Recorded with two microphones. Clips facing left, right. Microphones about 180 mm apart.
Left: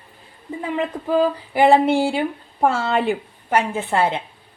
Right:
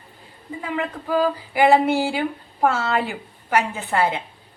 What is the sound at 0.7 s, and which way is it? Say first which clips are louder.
A woman's voice: left 3 dB; 30° left (ahead or behind).